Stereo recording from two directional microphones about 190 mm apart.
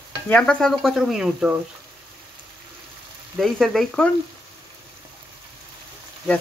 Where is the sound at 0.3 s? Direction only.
5° left (ahead or behind).